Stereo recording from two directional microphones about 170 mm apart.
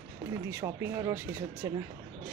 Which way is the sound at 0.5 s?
15° right (ahead or behind).